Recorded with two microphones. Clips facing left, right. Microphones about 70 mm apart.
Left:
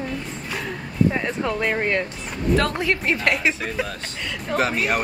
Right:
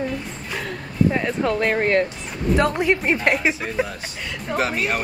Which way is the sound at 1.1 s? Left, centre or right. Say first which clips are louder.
Right 3 dB; centre.